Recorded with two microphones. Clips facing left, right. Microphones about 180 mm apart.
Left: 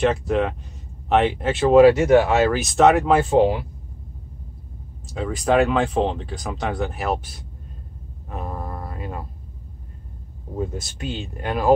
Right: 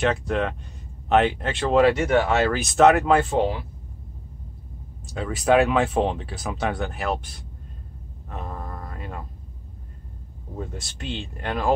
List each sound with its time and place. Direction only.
0.0 s speech: centre (ahead or behind)
3.3 s speech: 15° left (ahead or behind)
5.1 s speech: centre (ahead or behind)
8.3 s a sound: 10° left (ahead or behind)
10.6 s speech: 10° left (ahead or behind)